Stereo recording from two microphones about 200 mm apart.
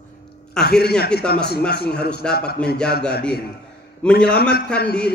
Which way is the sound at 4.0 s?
5° left (ahead or behind).